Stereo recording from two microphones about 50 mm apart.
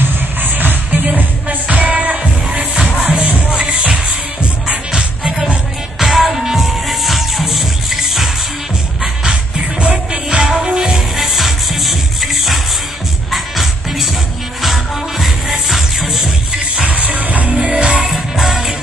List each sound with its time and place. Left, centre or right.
0.0 s music: right
4.4 s music: centre
5.9 s music: centre
9.2 s music: centre
10.4 s music: centre
16.9 s music: right
18.4 s music: centre